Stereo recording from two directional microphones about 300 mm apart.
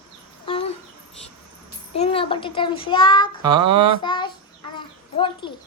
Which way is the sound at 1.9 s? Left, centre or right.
Centre.